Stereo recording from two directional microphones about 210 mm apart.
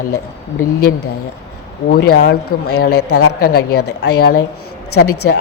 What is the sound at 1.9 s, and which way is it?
A woman's voice, 45° left (ahead or behind).